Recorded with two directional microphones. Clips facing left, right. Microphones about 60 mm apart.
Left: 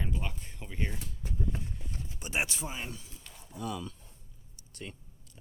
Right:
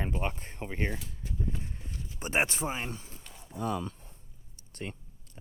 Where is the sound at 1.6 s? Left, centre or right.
Right.